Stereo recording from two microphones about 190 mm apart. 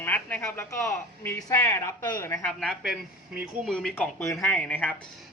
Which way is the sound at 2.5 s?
Centre (ahead or behind).